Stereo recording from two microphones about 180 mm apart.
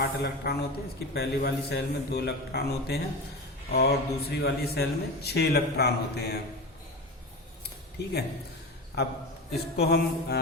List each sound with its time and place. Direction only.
0.0 s a man's voice: 60° left (ahead or behind)
8.0 s a man's voice: 65° left (ahead or behind)